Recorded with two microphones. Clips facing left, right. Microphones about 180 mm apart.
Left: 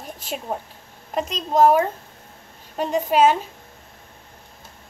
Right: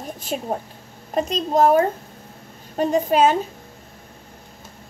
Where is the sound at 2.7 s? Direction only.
40° right (ahead or behind).